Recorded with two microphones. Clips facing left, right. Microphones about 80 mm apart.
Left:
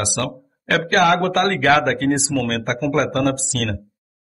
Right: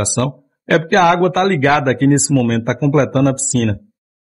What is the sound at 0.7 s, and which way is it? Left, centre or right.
Speech, right.